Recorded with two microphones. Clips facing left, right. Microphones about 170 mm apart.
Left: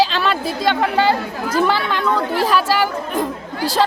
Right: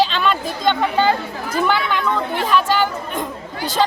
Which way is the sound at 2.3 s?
5° left (ahead or behind).